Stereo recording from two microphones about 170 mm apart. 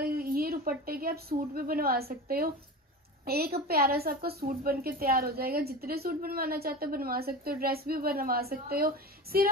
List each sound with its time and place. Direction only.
0.0 s a woman's voice: 60° right (ahead or behind)